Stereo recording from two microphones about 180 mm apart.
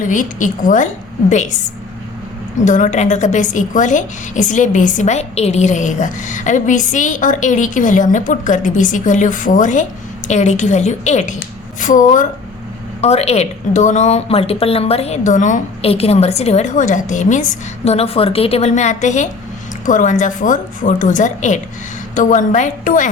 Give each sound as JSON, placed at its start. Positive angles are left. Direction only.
{"t": 0.0, "sound": "a woman's voice", "side_deg": 45}
{"t": 2.6, "sound": "a woman's voice", "side_deg": 45}